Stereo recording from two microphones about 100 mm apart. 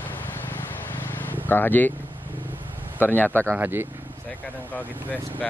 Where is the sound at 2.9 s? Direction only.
20° left (ahead or behind).